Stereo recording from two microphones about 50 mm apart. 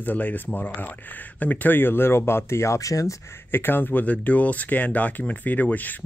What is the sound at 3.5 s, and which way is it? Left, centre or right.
Speech, left.